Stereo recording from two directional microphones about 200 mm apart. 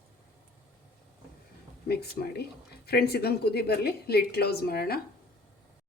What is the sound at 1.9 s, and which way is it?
Speech, 55° left (ahead or behind).